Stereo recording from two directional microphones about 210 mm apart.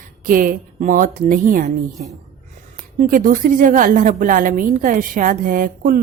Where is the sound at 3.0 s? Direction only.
40° right (ahead or behind).